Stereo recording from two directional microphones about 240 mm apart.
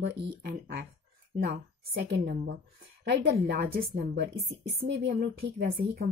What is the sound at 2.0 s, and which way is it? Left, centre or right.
A woman's voice, right.